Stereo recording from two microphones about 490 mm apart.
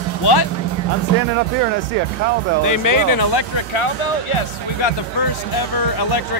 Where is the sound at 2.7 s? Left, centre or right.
Left.